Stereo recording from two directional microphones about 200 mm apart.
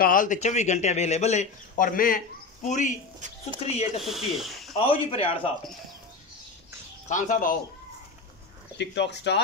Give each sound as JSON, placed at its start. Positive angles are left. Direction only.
{"t": 0.0, "sound": "speech", "side_deg": 40}
{"t": 4.0, "sound": "speech", "side_deg": 0}
{"t": 4.7, "sound": "speech", "side_deg": 30}
{"t": 7.1, "sound": "speech", "side_deg": 40}
{"t": 8.7, "sound": "speech", "side_deg": 60}